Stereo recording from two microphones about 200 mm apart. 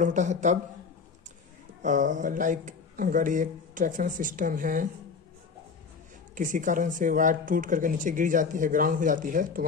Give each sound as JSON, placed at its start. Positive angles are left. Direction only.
{"t": 0.0, "sound": "speech", "side_deg": -40}
{"t": 1.8, "sound": "speech", "side_deg": -40}
{"t": 6.3, "sound": "speech", "side_deg": -40}